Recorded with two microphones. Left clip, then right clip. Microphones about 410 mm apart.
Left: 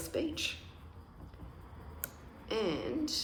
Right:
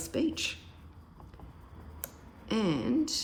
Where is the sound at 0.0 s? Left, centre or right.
Centre.